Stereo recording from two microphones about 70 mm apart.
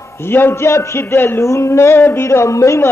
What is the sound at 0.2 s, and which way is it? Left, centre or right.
A man's voice, left.